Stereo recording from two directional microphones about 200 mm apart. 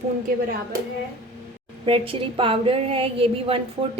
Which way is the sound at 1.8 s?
25° right (ahead or behind).